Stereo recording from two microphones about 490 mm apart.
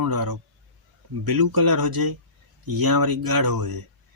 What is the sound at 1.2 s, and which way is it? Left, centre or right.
Speech, right.